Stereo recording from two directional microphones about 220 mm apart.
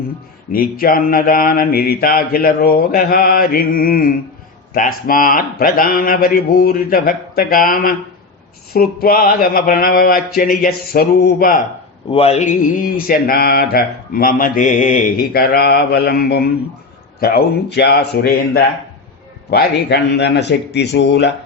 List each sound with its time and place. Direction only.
0.5 s mantra: 40° left (ahead or behind)
12.1 s mantra: 30° left (ahead or behind); by 16.5 s 45° left (ahead or behind)
17.2 s a man's voice: 40° left (ahead or behind)